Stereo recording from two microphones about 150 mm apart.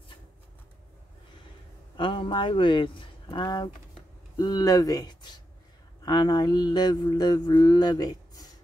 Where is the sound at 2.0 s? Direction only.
35° left (ahead or behind).